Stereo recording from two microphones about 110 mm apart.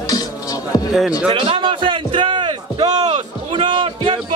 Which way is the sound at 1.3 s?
50° right (ahead or behind).